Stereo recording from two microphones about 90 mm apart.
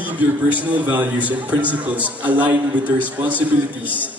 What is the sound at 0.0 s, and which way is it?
A man's voice, 15° right (ahead or behind).